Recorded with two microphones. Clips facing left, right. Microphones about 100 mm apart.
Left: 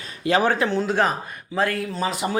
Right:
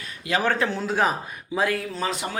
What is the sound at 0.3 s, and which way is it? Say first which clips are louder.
Speech: left 5 dB; 35° left (ahead or behind).